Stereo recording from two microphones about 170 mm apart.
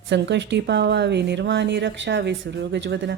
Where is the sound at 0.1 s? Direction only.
90° right.